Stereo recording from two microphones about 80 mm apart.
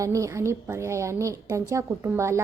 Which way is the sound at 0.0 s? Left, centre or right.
Right.